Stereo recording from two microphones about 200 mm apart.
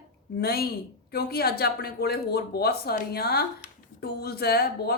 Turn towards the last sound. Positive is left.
turn(degrees=50)  # may be behind; listen again after turning